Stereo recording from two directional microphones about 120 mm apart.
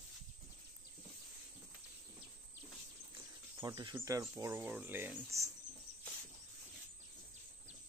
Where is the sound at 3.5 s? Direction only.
40° right (ahead or behind).